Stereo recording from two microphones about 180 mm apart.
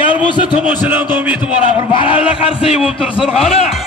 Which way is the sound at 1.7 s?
30° left (ahead or behind).